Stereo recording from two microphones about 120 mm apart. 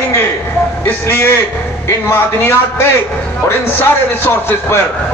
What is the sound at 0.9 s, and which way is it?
Speech, 20° left (ahead or behind).